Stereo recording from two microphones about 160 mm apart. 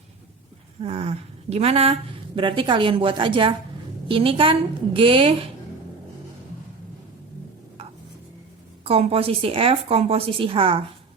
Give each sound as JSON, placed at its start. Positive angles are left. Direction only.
{"t": 0.8, "sound": "speech", "side_deg": -40}
{"t": 8.8, "sound": "speech", "side_deg": -35}